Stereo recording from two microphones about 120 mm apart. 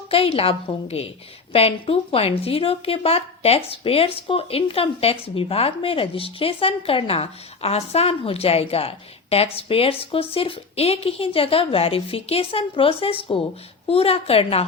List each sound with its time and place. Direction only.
0.1 s a woman's voice: 50° left (ahead or behind)